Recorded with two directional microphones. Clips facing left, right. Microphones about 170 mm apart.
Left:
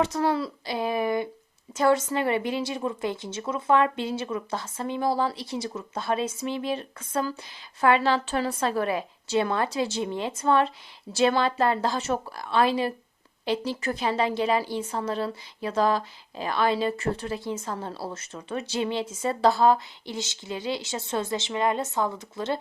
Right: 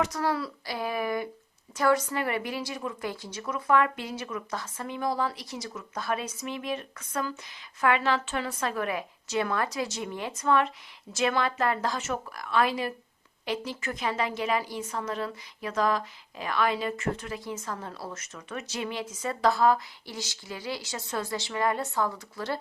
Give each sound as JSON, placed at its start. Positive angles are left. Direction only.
{"t": 0.0, "sound": "a woman's voice", "side_deg": 25}